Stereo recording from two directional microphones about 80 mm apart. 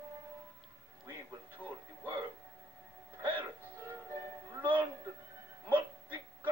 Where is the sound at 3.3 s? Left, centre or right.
Right.